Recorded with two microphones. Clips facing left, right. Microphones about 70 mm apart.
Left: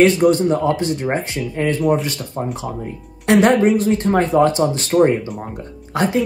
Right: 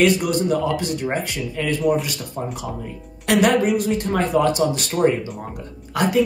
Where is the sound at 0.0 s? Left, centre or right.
Left.